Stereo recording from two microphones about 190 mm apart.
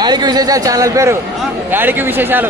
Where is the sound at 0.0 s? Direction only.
20° right (ahead or behind).